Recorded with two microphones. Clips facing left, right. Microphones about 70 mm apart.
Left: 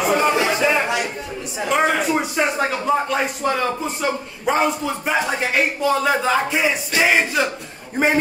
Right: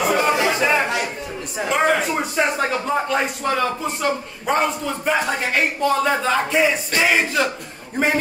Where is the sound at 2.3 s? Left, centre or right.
Centre.